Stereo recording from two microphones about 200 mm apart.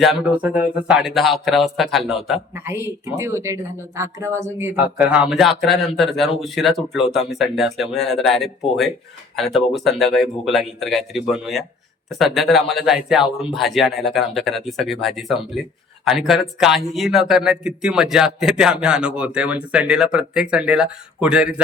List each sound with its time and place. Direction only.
0.0 s speech: centre (ahead or behind)
2.6 s speech: 10° right (ahead or behind)